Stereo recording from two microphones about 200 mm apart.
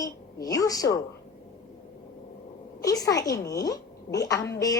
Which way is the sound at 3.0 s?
15° left (ahead or behind).